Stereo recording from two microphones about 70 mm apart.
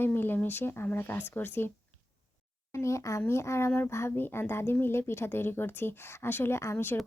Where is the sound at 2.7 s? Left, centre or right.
Left.